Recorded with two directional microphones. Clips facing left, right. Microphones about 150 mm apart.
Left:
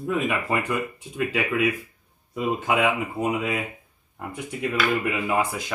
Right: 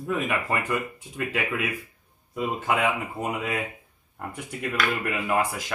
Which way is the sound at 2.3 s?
5° left (ahead or behind).